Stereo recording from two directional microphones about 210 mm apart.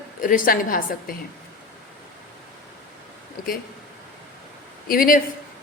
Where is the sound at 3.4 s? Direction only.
45° left (ahead or behind).